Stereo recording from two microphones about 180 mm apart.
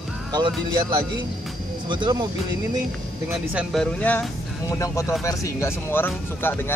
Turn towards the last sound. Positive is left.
turn(degrees=10)  # may be behind; listen again after turning